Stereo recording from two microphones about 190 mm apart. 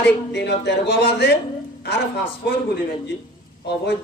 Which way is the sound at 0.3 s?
65° left (ahead or behind).